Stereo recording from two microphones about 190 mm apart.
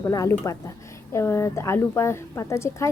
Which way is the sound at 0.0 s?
15° left (ahead or behind).